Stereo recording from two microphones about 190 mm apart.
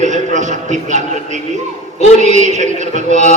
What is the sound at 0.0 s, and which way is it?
A man's voice, 40° right (ahead or behind).